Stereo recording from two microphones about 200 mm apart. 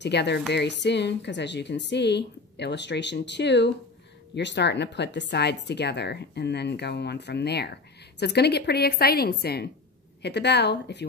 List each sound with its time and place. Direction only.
0.0 s a woman's voice: 55° left (ahead or behind)